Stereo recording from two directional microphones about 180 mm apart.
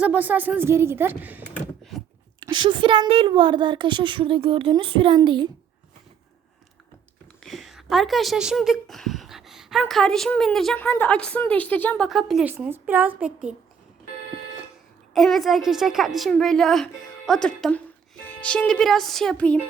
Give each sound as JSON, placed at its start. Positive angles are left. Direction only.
{"t": 0.0, "sound": "a woman's voice", "side_deg": -10}
{"t": 1.9, "sound": "a sound", "side_deg": 0}
{"t": 2.4, "sound": "a woman's voice", "side_deg": -25}
{"t": 7.4, "sound": "a sound", "side_deg": 0}
{"t": 9.8, "sound": "a woman's voice", "side_deg": 5}
{"t": 15.1, "sound": "a woman's voice", "side_deg": 0}